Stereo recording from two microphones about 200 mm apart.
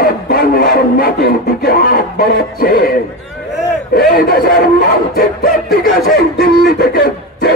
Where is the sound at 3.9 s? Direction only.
45° left (ahead or behind).